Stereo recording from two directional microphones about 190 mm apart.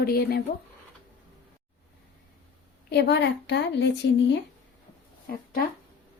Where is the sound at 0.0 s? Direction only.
55° left (ahead or behind).